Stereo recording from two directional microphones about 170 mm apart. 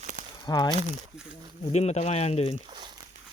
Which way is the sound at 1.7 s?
40° left (ahead or behind).